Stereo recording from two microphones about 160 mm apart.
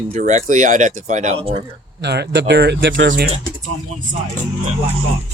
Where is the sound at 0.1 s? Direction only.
50° right (ahead or behind).